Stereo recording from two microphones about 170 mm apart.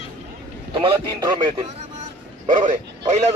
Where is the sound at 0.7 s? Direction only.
30° right (ahead or behind).